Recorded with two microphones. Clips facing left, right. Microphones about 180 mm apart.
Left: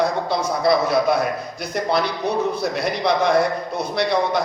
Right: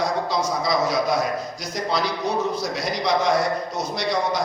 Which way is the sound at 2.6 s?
60° left (ahead or behind).